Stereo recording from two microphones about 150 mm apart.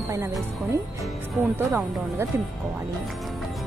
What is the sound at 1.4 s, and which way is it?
Speech, 15° right (ahead or behind).